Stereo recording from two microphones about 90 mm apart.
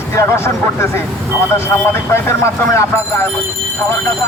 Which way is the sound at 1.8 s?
30° left (ahead or behind).